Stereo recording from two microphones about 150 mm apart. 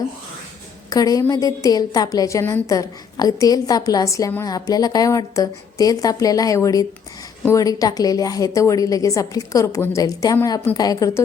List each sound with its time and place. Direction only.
0.9 s a woman's voice: 25° left (ahead or behind)